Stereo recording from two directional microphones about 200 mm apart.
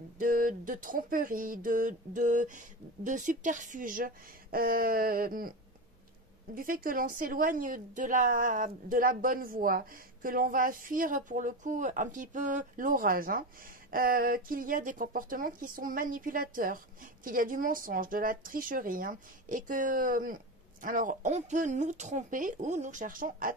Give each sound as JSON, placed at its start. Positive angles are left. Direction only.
{"t": 0.2, "sound": "a woman's voice", "side_deg": -45}
{"t": 6.5, "sound": "a woman's voice", "side_deg": -45}